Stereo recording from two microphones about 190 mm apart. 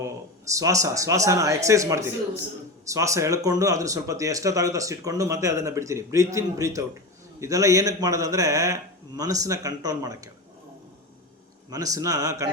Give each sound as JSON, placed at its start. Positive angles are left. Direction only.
{"t": 0.0, "sound": "speech", "side_deg": -15}
{"t": 11.7, "sound": "speech", "side_deg": -20}